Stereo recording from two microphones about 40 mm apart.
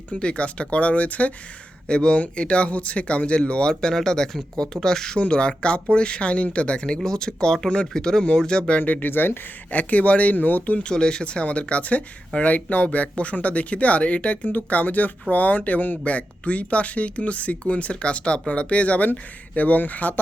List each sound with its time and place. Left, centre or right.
0.1 s speech: left
1.9 s speech: left
3.7 s speech: centre
5.1 s speech: left
7.0 s speech: centre
8.8 s speech: left
9.7 s speech: left
10.3 s speech: left
10.8 s speech: left
14.4 s speech: left
16.0 s speech: left